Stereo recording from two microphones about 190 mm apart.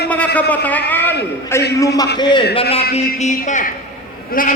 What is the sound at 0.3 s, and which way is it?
Speech, 10° left (ahead or behind).